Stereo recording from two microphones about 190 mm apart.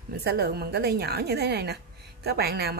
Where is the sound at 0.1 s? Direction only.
55° right (ahead or behind).